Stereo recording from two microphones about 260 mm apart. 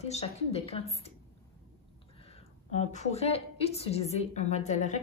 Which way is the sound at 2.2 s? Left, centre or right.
Left.